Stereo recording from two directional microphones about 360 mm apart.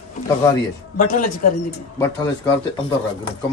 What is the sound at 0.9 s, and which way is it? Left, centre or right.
Speech, left.